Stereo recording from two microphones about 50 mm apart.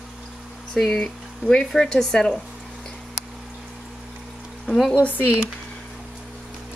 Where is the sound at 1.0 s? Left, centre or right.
Centre.